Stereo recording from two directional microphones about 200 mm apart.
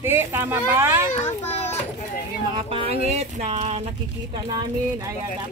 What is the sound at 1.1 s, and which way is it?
Speech, 35° left (ahead or behind).